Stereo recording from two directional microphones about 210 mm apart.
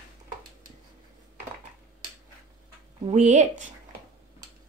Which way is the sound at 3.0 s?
35° right (ahead or behind).